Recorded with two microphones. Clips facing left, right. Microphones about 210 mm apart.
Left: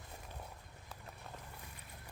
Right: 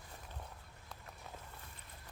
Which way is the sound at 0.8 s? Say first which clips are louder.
Left 1 dB; centre (ahead or behind).